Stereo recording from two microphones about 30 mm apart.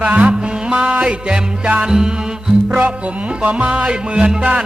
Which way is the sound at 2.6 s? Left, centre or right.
Right.